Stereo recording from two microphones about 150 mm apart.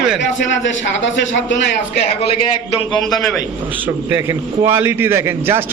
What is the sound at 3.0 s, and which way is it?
Speech, centre (ahead or behind).